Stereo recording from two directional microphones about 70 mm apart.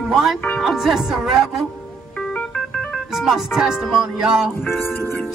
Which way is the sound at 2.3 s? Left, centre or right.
Centre.